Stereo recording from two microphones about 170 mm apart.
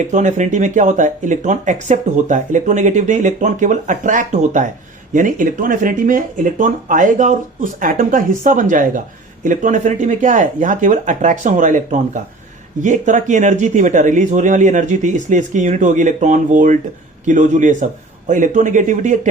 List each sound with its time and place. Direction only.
0.1 s speech: 45° right (ahead or behind)